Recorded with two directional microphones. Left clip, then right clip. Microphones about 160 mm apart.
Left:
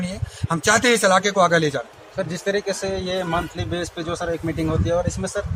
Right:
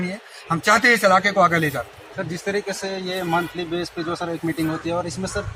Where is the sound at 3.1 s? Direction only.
20° left (ahead or behind).